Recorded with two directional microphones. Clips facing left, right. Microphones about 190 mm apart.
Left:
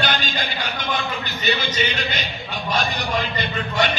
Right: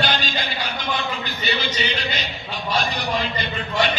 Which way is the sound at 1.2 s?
45° left (ahead or behind).